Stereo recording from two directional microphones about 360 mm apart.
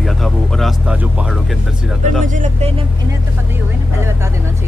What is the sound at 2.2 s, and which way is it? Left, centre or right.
Speech, right.